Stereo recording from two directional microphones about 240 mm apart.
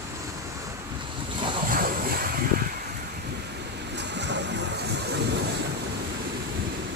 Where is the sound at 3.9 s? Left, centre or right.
Right.